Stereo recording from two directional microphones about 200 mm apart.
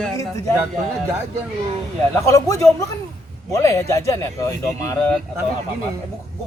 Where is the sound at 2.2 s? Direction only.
15° left (ahead or behind).